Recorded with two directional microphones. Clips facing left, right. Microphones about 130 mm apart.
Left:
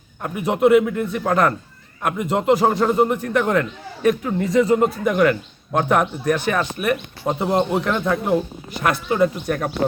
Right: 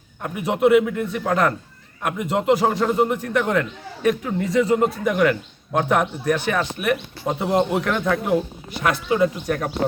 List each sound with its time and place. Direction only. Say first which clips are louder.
0.2 s a man's voice: left 2 dB; 45° left (ahead or behind)
7.3 s speech: even; 30° left (ahead or behind)
8.7 s a man's voice: even; 50° left (ahead or behind)